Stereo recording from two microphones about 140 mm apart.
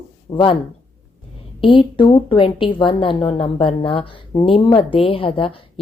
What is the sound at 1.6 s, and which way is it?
Speech, 35° left (ahead or behind).